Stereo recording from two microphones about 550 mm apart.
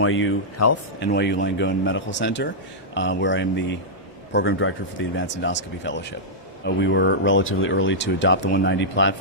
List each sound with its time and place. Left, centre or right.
0.0 s speech: left